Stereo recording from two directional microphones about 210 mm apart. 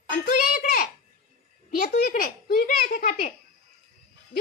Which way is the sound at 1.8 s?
45° left (ahead or behind).